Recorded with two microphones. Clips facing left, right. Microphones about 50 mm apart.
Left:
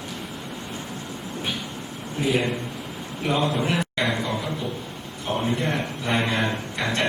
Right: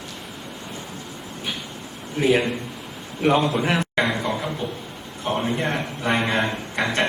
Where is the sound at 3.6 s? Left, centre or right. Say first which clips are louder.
Right 3 dB; right.